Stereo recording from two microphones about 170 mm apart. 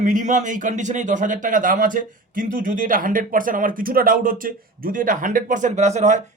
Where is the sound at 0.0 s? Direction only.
50° right (ahead or behind).